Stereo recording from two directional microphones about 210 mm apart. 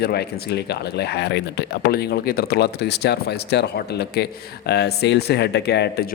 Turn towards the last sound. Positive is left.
turn(degrees=50)  # may be behind; listen again after turning